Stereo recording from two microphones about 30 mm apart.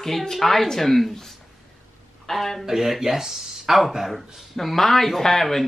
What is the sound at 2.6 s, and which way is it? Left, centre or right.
Speech, centre.